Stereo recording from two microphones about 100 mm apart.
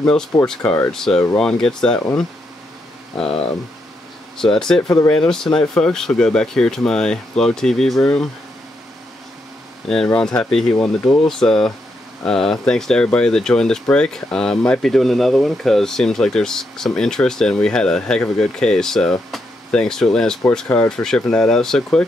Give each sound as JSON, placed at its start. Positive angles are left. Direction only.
{"t": 0.0, "sound": "speech", "side_deg": 10}
{"t": 0.7, "sound": "speech", "side_deg": 20}
{"t": 0.9, "sound": "speech", "side_deg": 5}
{"t": 3.3, "sound": "speech", "side_deg": 70}
{"t": 4.4, "sound": "speech", "side_deg": 5}
{"t": 4.8, "sound": "speech", "side_deg": 35}
{"t": 5.1, "sound": "speech", "side_deg": 5}
{"t": 10.1, "sound": "speech", "side_deg": 10}
{"t": 20.6, "sound": "speech", "side_deg": 20}
{"t": 20.9, "sound": "speech", "side_deg": 5}